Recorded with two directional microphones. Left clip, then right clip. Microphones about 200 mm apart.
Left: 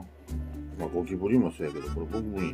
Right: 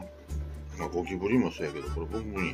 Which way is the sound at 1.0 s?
30° left (ahead or behind).